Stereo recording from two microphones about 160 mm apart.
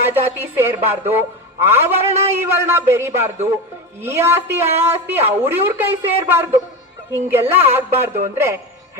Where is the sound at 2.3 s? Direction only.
15° right (ahead or behind).